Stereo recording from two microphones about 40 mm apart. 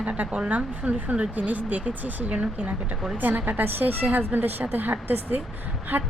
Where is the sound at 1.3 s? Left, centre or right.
Right.